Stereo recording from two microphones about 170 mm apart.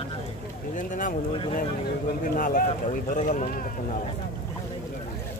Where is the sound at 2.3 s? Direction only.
55° left (ahead or behind).